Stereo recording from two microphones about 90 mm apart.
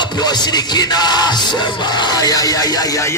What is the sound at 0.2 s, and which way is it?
Music, 50° left (ahead or behind).